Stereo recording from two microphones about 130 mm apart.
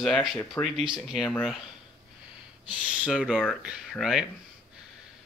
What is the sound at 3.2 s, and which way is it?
Speech, centre (ahead or behind).